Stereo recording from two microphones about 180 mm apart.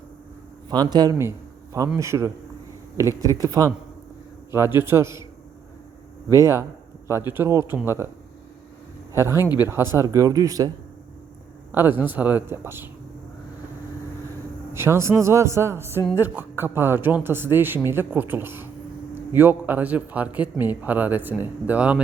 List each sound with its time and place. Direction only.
0.7 s a man's voice: 25° right (ahead or behind)
6.2 s a man's voice: 15° right (ahead or behind)
9.2 s a man's voice: 15° right (ahead or behind)
11.7 s a man's voice: 10° right (ahead or behind)
14.7 s a man's voice: 15° right (ahead or behind)